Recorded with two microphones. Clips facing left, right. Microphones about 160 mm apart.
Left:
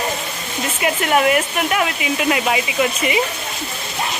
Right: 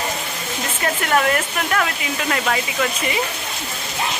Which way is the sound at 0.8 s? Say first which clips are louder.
Left 3 dB; 15° left (ahead or behind).